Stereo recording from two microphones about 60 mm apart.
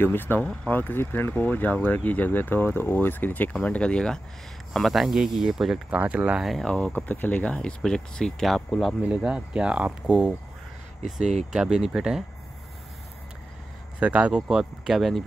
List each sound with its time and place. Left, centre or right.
0.0 s speech: left
0.4 s speech: left
3.5 s speech: centre
4.7 s speech: centre
5.9 s speech: right
6.4 s speech: centre
7.1 s speech: left
7.5 s speech: centre
9.1 s speech: centre
13.9 s speech: right
14.3 s speech: centre